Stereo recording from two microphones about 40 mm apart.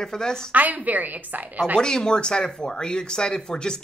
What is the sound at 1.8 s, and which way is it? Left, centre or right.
Speech, centre.